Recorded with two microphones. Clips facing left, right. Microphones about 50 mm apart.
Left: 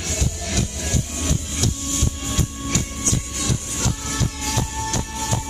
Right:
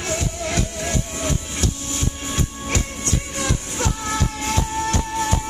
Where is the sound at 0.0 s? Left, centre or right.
Right.